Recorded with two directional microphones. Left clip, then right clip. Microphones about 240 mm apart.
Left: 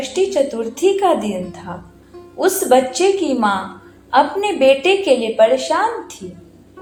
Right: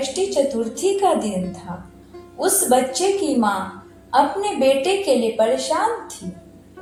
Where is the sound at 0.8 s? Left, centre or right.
Left.